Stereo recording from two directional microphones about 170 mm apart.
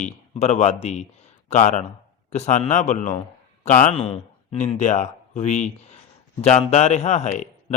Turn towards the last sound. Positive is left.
turn(degrees=45)  # may be behind; listen again after turning